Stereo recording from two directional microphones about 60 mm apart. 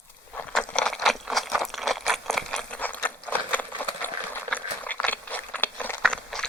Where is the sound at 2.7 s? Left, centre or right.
Left.